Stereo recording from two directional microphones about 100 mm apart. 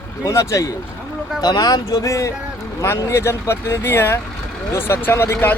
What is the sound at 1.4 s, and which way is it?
Speech, 40° left (ahead or behind).